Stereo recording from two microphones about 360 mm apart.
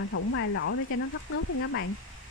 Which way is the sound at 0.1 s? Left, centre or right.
Left.